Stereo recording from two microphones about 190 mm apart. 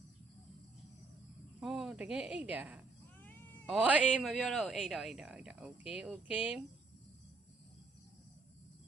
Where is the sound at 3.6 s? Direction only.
5° right (ahead or behind).